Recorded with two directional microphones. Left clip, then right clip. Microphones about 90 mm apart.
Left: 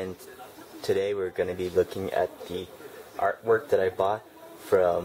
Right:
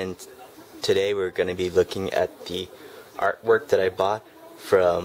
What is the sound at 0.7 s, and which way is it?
Speech, 85° right.